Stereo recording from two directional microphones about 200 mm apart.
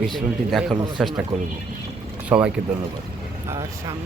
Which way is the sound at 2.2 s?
5° right (ahead or behind).